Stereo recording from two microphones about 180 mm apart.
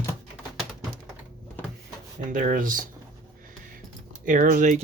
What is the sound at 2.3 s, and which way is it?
Speech, 50° right (ahead or behind).